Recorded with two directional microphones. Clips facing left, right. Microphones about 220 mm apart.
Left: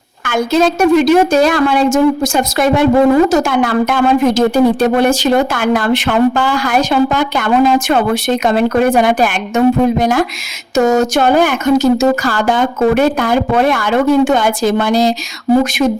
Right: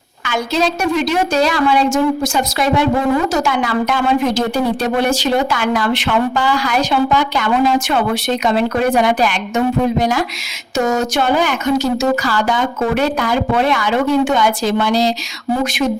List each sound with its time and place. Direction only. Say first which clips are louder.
0.3 s a woman's voice: left 5 dB; 50° left (ahead or behind)